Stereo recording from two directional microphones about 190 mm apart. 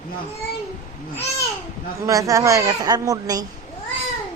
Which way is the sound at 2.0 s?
15° right (ahead or behind).